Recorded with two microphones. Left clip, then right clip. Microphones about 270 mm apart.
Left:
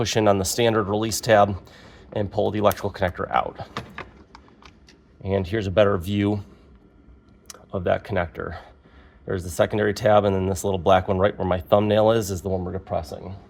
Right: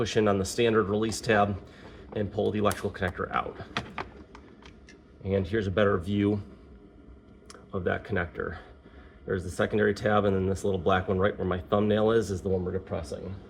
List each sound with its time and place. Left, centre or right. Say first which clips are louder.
0.0 s speech: left 6 dB; left
5.2 s speech: left 4 dB; left
7.4 s speech: left 6 dB; left